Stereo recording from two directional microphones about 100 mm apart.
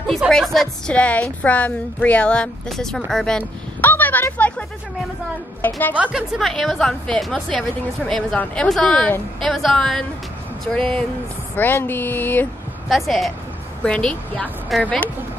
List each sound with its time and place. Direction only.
0.3 s a woman's voice: 5° left (ahead or behind)
3.8 s a woman's voice: 20° left (ahead or behind)
6.1 s a woman's voice: centre (ahead or behind)
11.5 s speech: 20° left (ahead or behind)
12.8 s a woman's voice: centre (ahead or behind)
13.8 s speech: 10° left (ahead or behind)